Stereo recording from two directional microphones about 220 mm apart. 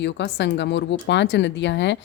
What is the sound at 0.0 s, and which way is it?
A woman's voice, 55° left (ahead or behind).